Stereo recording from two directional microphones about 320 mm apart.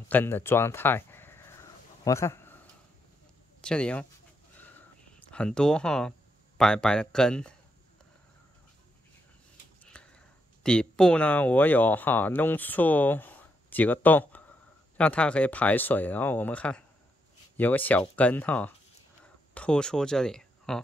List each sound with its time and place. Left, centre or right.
0.1 s speech: centre
2.0 s a sound: centre
3.6 s speech: centre
5.2 s speech: centre
9.8 s speech: centre